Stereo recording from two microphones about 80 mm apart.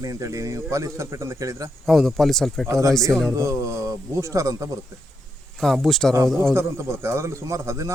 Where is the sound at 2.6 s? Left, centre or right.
Right.